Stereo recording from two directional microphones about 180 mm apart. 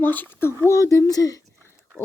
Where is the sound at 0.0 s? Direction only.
10° left (ahead or behind).